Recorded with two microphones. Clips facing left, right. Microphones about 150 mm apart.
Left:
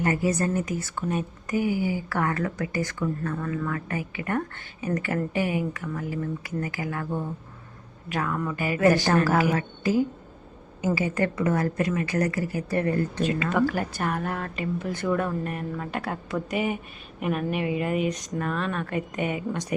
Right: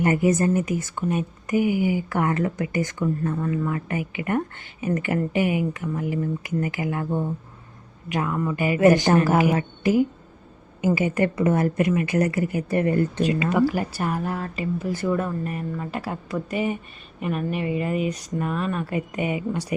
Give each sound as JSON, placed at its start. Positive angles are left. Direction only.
{"t": 0.0, "sound": "a woman's voice", "side_deg": -20}